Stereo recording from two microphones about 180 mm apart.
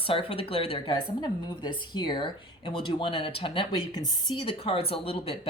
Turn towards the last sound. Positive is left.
turn(degrees=30)  # may be behind; listen again after turning